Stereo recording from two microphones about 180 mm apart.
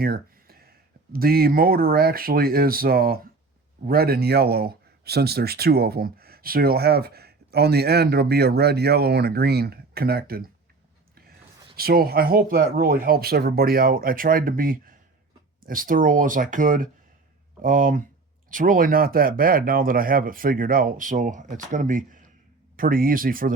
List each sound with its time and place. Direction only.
0.0 s a sound: 55° right (ahead or behind)
1.1 s speech: 55° right (ahead or behind)
11.8 s speech: 55° right (ahead or behind)